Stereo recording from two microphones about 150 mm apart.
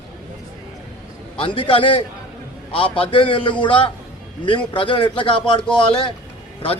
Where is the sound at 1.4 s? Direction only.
35° left (ahead or behind).